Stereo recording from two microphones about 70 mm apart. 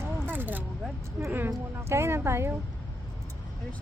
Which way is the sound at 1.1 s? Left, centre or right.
Right.